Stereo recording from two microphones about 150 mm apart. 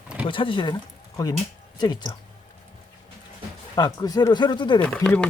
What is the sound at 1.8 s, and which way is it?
Speech, 30° left (ahead or behind).